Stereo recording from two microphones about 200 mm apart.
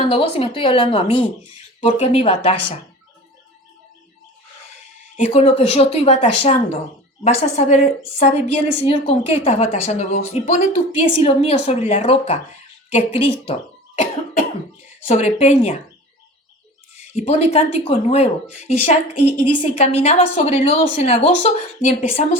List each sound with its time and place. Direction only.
0.1 s speech: 30° left (ahead or behind)
5.1 s a woman's voice: 35° left (ahead or behind)
8.8 s a woman's voice: 30° left (ahead or behind)
14.8 s speech: 35° left (ahead or behind)
17.0 s a woman's voice: 30° left (ahead or behind)